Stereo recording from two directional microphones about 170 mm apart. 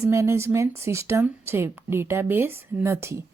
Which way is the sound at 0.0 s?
15° right (ahead or behind).